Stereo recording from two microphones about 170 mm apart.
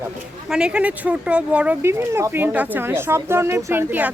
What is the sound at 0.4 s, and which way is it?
Speech, 5° right (ahead or behind).